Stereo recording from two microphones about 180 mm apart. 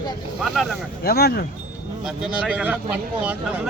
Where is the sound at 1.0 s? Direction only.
60° left (ahead or behind).